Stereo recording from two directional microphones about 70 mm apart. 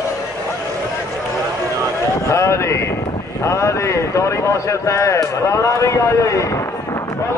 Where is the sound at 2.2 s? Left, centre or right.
Left.